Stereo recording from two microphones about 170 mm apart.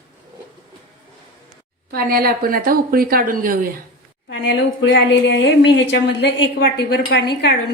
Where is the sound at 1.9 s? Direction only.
60° right (ahead or behind).